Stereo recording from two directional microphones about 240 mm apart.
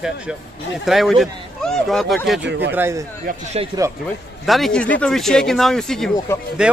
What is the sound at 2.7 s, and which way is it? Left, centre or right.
Speech, centre.